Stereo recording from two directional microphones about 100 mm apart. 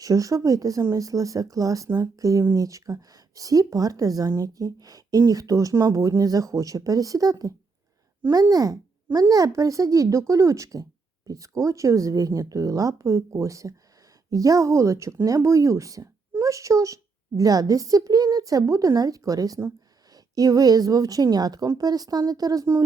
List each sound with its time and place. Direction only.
0.0 s speech: 35° right (ahead or behind)